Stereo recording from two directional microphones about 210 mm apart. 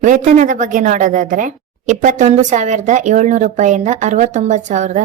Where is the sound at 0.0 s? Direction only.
35° right (ahead or behind).